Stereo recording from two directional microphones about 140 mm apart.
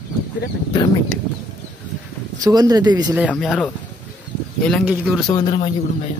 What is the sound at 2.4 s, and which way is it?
Speech, 30° right (ahead or behind).